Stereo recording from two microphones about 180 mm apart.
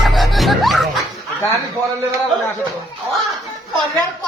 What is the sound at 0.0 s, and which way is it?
Music, centre (ahead or behind).